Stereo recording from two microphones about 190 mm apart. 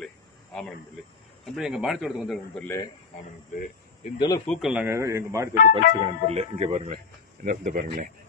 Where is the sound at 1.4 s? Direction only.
Centre (ahead or behind).